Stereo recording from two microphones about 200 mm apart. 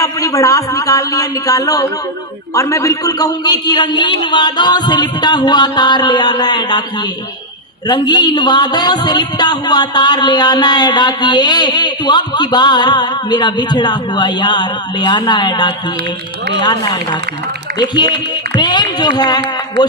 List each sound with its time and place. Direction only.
0.0 s a man's voice: 15° left (ahead or behind)
7.9 s a man's voice: 20° left (ahead or behind)